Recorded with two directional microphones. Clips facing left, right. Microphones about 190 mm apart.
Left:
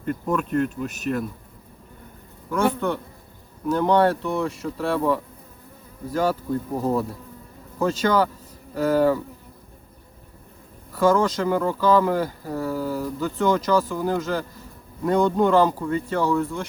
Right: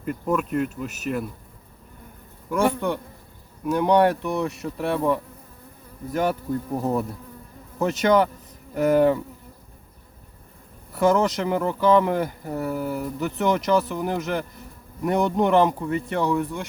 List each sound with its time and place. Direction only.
0.0 s speech: 5° right (ahead or behind)
2.5 s speech: 15° right (ahead or behind)
7.8 s speech: 20° right (ahead or behind)
10.9 s speech: 20° right (ahead or behind)